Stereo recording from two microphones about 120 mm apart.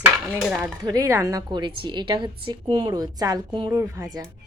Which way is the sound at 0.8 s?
25° right (ahead or behind).